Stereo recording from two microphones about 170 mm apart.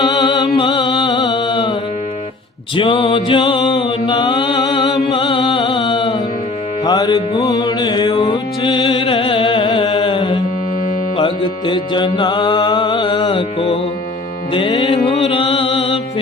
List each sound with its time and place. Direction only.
0.0 s music: 25° left (ahead or behind)
2.7 s mantra: 30° left (ahead or behind)
5.0 s music: 30° left (ahead or behind)